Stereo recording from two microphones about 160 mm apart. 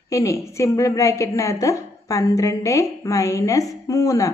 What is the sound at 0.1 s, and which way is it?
A woman's voice, 20° left (ahead or behind).